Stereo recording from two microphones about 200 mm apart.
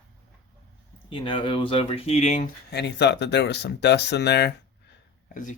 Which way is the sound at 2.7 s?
60° left (ahead or behind).